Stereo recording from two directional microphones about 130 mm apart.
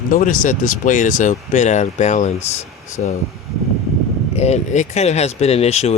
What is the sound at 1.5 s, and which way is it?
Speech, 65° left (ahead or behind).